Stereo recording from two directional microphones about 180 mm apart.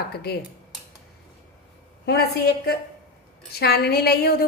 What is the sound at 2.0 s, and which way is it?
A woman's voice, 60° left (ahead or behind).